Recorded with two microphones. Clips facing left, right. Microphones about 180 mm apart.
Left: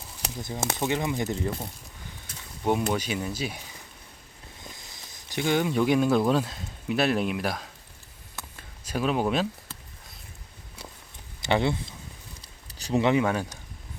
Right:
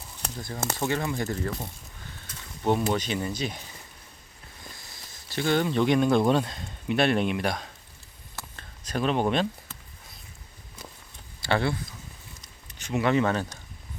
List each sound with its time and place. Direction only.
0.3 s speech: 20° left (ahead or behind)
2.8 s speech: 5° left (ahead or behind)
5.3 s speech: 15° left (ahead or behind)
8.4 s a sound: 10° left (ahead or behind)
11.3 s speech: 20° left (ahead or behind)
12.4 s a sound: 35° left (ahead or behind)
13.1 s speech: 10° left (ahead or behind)